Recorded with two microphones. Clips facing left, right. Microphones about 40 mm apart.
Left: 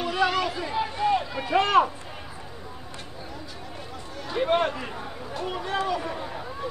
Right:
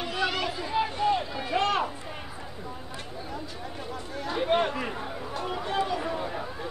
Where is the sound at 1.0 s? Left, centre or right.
Centre.